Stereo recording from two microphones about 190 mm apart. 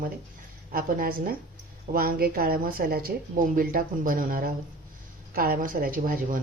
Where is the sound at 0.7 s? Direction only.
50° right (ahead or behind).